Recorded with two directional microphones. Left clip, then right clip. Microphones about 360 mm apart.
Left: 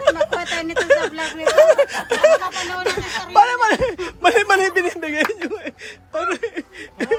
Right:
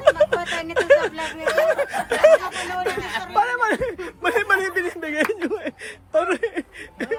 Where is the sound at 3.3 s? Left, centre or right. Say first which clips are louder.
Left 6 dB; centre.